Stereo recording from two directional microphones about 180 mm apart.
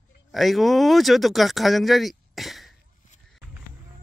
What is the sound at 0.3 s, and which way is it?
Speech, centre (ahead or behind).